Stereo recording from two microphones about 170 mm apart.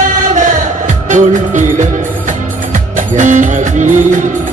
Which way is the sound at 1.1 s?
45° right (ahead or behind).